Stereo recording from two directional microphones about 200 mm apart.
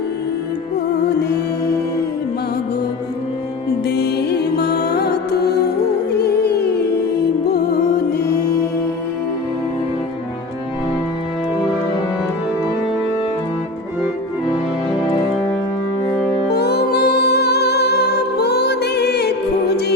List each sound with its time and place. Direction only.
3.8 s music: 55° left (ahead or behind)
16.5 s music: 55° left (ahead or behind)